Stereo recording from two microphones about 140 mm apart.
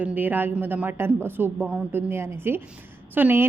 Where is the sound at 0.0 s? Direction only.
10° right (ahead or behind).